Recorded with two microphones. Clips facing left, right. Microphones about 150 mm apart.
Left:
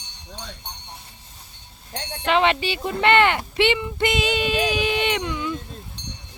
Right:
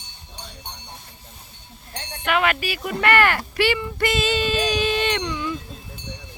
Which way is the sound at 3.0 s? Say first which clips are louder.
Left 2 dB; 20° left (ahead or behind).